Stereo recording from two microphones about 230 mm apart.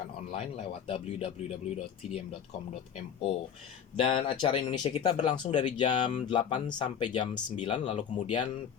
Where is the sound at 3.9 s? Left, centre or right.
Left.